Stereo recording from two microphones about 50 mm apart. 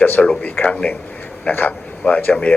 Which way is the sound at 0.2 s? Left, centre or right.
Centre.